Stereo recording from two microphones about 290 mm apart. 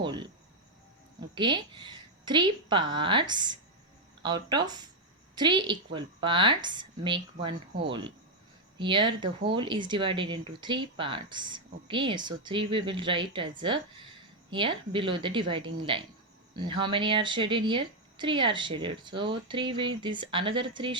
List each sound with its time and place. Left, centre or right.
0.0 s cricket: centre
1.4 s speech: centre